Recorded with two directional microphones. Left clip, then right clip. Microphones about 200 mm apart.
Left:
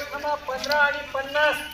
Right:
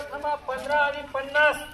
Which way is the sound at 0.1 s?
5° right (ahead or behind).